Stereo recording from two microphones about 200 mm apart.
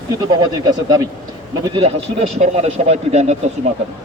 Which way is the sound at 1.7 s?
30° right (ahead or behind).